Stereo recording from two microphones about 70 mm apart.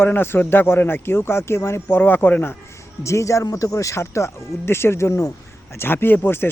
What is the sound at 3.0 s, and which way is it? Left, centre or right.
Speech, left.